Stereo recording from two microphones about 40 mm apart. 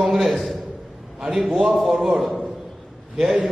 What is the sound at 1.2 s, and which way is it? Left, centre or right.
Speech, centre.